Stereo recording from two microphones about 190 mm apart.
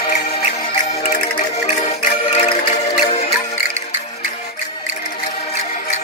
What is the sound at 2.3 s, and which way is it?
Music, 35° left (ahead or behind).